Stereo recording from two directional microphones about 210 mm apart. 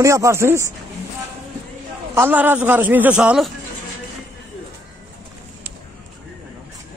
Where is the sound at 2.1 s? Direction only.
10° right (ahead or behind).